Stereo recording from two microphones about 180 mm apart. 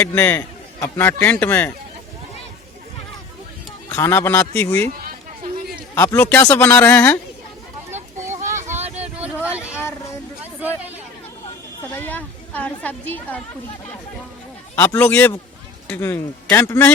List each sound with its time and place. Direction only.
0.0 s a man's voice: 10° left (ahead or behind)
3.9 s a man's voice: 15° left (ahead or behind)
5.0 s music: 55° right (ahead or behind)
5.9 s a man's voice: 15° left (ahead or behind)
7.9 s a sound: 40° right (ahead or behind)
8.6 s vehicle: 40° right (ahead or behind)
9.0 s vehicle: 10° right (ahead or behind)
11.9 s a woman's voice: 10° left (ahead or behind)
14.8 s a man's voice: 10° left (ahead or behind)